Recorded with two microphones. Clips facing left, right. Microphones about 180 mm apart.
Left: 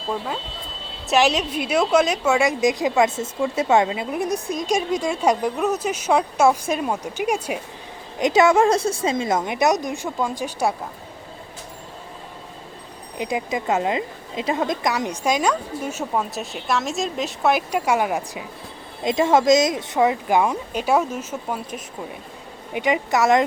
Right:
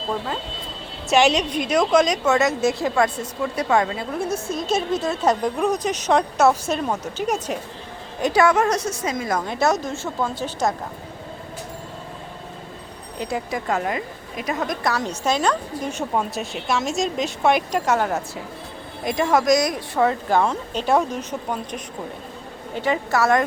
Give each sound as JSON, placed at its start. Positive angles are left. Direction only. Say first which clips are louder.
{"t": 1.0, "sound": "a woman's voice", "louder": "right 1 dB", "side_deg": 0}
{"t": 8.2, "sound": "a woman's voice", "louder": "left 2 dB", "side_deg": 20}
{"t": 13.1, "sound": "a woman's voice", "louder": "left 2 dB", "side_deg": 15}
{"t": 19.0, "sound": "a woman's voice", "louder": "left 2 dB", "side_deg": 25}
{"t": 22.7, "sound": "a woman's voice", "louder": "left 1 dB", "side_deg": 15}